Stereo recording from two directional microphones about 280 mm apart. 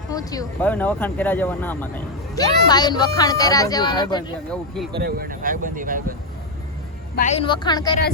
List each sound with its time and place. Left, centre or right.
0.1 s speech: centre
4.5 s speech: centre
4.9 s speech: right
7.2 s speech: left